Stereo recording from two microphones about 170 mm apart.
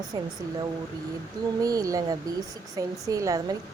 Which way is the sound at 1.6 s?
20° right (ahead or behind).